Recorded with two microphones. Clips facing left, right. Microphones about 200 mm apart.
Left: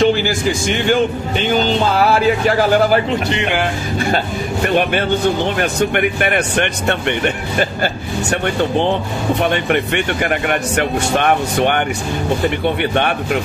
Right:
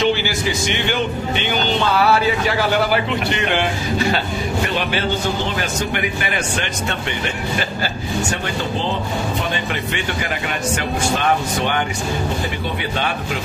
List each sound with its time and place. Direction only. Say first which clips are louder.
0.0 s speech: left 4 dB; 50° left (ahead or behind)
5.6 s speech: left 6 dB; 60° left (ahead or behind)
9.5 s speech: left 7 dB; 60° left (ahead or behind)